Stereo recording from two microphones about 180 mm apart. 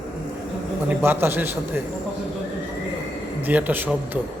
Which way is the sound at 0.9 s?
10° right (ahead or behind).